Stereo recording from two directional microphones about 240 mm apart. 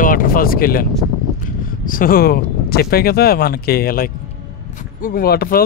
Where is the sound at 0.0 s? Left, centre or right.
Left.